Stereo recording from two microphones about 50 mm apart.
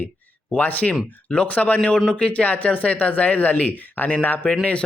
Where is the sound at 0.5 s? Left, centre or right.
Left.